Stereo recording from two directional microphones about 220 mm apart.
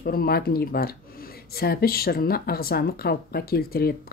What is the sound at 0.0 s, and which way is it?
Speech, 40° left (ahead or behind).